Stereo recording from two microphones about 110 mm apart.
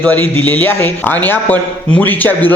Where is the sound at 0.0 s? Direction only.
15° left (ahead or behind).